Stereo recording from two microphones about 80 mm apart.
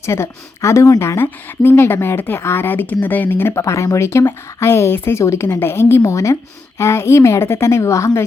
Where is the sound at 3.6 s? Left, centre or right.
Left.